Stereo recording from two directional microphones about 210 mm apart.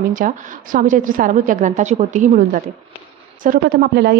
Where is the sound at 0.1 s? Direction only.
40° right (ahead or behind).